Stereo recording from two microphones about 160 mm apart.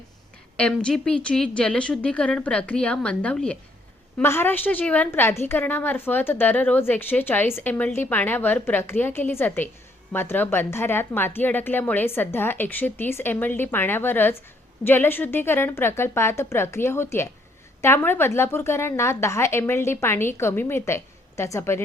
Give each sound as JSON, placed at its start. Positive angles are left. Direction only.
{"t": 0.5, "sound": "a woman's voice", "side_deg": 5}